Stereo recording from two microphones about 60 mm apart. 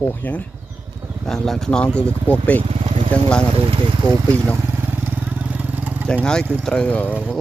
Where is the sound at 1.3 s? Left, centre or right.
Centre.